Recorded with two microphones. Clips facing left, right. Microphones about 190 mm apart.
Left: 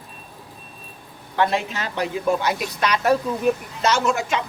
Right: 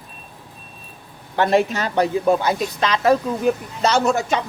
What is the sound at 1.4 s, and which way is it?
Speech, 45° right (ahead or behind).